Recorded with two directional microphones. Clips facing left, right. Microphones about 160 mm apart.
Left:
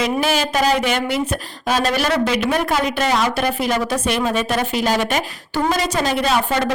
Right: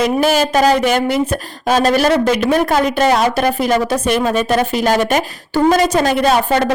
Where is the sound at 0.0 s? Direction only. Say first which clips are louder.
Right 5 dB; 45° right (ahead or behind).